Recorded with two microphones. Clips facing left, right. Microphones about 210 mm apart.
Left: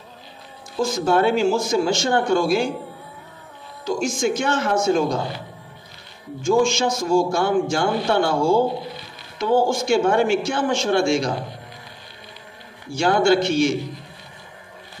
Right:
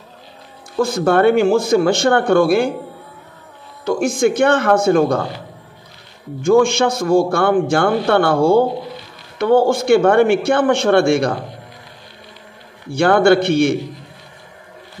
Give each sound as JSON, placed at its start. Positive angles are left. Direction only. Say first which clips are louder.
{"t": 0.7, "sound": "a man's voice", "louder": "right 4 dB", "side_deg": -60}
{"t": 3.8, "sound": "a man's voice", "louder": "right 6 dB", "side_deg": -60}
{"t": 6.4, "sound": "a man's voice", "louder": "right 5 dB", "side_deg": -60}
{"t": 12.9, "sound": "a man's voice", "louder": "right 5 dB", "side_deg": -60}